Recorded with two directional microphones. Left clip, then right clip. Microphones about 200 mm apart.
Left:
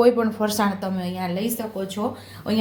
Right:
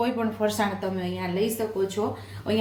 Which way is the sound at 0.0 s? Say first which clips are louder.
Left 7 dB; 35° left (ahead or behind).